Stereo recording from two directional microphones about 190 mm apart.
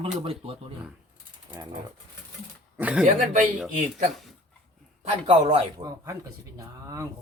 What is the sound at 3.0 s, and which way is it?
Speech, 40° right (ahead or behind).